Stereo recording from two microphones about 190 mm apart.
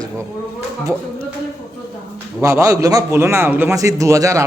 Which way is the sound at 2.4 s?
15° right (ahead or behind).